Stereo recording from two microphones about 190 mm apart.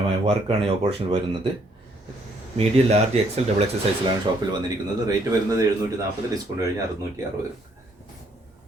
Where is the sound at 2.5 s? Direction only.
35° right (ahead or behind).